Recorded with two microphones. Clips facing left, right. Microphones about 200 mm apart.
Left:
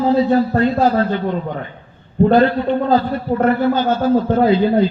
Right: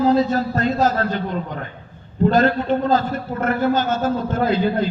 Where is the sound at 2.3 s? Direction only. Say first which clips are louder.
Left 2 dB; 45° right (ahead or behind).